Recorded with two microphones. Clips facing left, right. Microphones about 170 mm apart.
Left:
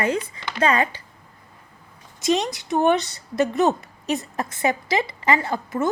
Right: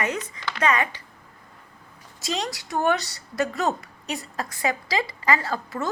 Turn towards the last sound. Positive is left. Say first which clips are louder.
# left 5 dB
turn(degrees=20)  # may be behind; listen again after turning